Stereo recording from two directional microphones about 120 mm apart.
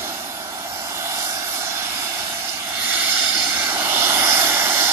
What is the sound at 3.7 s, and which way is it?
Vehicle, 20° right (ahead or behind).